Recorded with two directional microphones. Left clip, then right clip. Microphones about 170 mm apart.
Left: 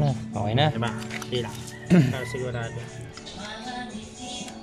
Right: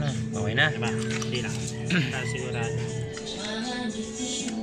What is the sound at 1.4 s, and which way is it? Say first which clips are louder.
Speech: even; 35° left (ahead or behind).